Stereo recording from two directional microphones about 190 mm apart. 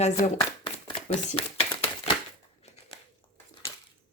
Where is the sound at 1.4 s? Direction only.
30° left (ahead or behind).